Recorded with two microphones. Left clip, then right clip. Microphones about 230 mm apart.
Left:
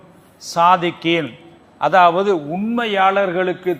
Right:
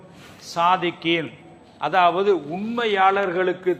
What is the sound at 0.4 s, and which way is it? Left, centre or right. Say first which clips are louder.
A man's voice: left 6 dB; left.